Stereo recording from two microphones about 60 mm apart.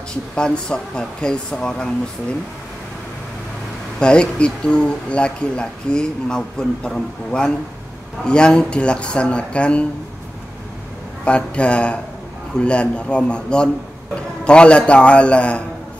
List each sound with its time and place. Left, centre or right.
0.4 s speech: centre
4.0 s speech: centre
11.2 s a man's voice: centre